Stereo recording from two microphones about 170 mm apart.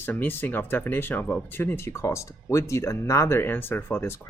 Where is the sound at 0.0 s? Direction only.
10° left (ahead or behind).